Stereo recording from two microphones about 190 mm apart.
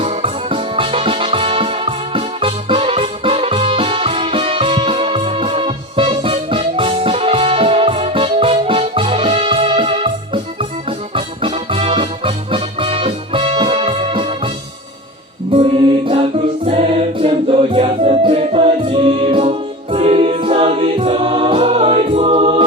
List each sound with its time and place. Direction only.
0.0 s music: 30° right (ahead or behind)
15.5 s music: 30° right (ahead or behind)